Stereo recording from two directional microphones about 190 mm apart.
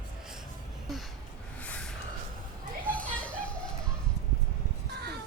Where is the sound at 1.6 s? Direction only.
5° left (ahead or behind).